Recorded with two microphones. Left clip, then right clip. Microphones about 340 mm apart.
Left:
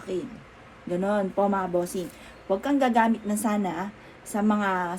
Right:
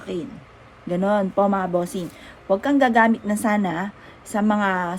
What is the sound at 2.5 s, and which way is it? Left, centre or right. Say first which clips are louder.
Speech: right 5 dB; right.